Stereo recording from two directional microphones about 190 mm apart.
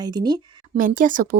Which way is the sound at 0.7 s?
45° right (ahead or behind).